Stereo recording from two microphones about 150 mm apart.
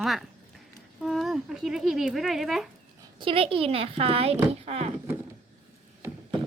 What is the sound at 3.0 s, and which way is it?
Speech, 35° right (ahead or behind).